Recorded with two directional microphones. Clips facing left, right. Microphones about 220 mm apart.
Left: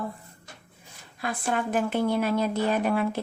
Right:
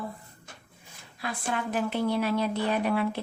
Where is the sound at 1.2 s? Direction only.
50° left (ahead or behind).